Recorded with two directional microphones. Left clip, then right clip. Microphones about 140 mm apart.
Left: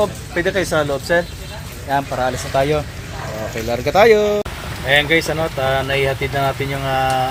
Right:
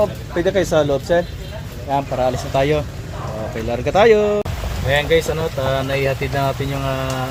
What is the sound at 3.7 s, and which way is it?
Speech, centre (ahead or behind).